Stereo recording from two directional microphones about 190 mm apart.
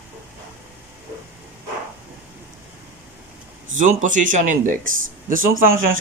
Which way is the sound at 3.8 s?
40° right (ahead or behind).